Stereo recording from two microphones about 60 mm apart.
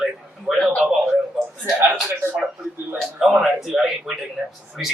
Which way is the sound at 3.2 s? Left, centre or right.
Centre.